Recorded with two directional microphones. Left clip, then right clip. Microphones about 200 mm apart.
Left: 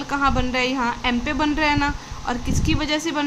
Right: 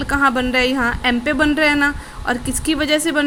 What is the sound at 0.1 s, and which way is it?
A woman's voice, 20° right (ahead or behind).